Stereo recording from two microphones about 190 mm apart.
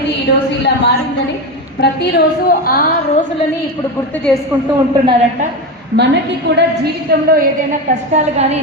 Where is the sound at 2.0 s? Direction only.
55° left (ahead or behind).